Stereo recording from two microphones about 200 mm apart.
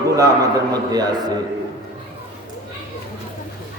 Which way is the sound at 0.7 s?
20° right (ahead or behind).